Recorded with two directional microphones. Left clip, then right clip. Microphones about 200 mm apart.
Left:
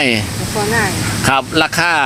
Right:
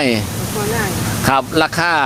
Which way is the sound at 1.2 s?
10° right (ahead or behind).